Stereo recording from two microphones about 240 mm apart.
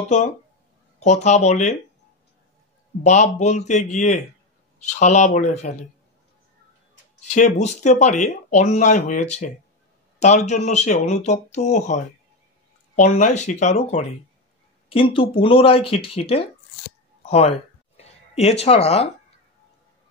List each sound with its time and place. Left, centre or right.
0.9 s speech: left
3.0 s speech: left
7.3 s speech: left
17.2 s a sound: left